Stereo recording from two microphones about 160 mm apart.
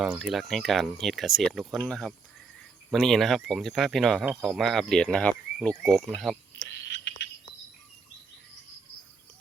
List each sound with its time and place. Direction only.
0.0 s speech: 5° right (ahead or behind)
6.8 s bird: 90° left